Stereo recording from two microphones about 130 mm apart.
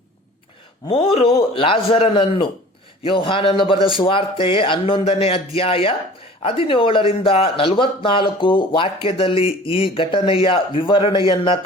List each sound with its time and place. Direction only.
0.9 s a man's voice: 50° left (ahead or behind)